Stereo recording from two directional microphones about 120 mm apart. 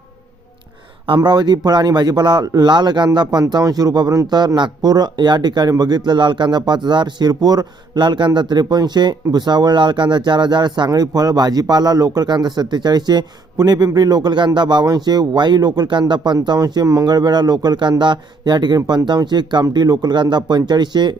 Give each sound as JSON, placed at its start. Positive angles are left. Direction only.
{"t": 1.0, "sound": "speech", "side_deg": -40}